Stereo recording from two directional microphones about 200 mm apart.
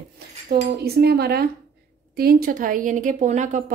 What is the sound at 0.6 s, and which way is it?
A woman's voice, 50° right (ahead or behind).